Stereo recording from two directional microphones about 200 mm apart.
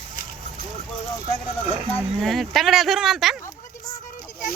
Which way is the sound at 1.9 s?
Centre (ahead or behind).